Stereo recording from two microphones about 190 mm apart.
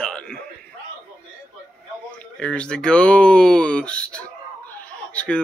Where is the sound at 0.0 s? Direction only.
5° left (ahead or behind).